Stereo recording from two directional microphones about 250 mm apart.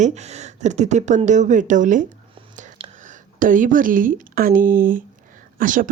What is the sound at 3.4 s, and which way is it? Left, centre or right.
Speech, right.